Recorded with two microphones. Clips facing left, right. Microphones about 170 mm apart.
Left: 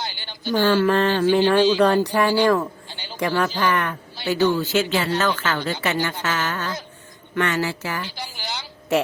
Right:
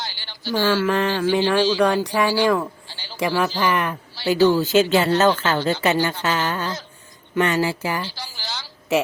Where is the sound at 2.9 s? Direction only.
15° left (ahead or behind).